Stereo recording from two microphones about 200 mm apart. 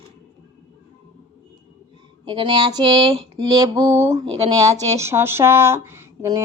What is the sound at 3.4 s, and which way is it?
Speech, 15° right (ahead or behind).